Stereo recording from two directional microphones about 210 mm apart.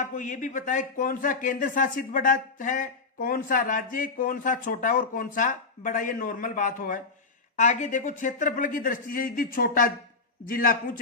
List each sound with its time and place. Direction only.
0.0 s a man's voice: 40° left (ahead or behind)